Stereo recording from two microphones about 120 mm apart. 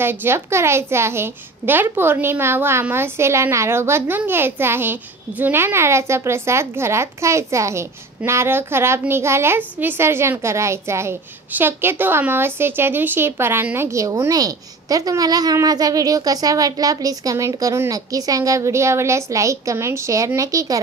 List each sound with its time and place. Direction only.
0.0 s a woman's voice: 20° right (ahead or behind)